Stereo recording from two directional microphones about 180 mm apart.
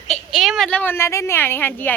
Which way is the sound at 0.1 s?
Centre (ahead or behind).